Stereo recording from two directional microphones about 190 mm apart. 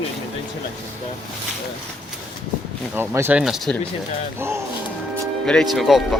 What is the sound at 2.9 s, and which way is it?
Speech, 10° right (ahead or behind).